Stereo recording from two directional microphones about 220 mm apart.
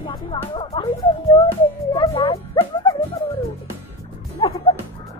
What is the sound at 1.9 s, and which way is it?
Speech, 20° left (ahead or behind).